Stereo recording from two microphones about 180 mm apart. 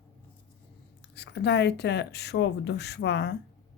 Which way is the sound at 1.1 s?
70° left (ahead or behind).